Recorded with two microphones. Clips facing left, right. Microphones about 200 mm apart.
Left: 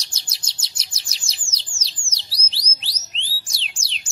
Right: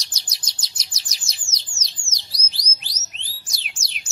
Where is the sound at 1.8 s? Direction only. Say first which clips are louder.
Even; 30° left (ahead or behind).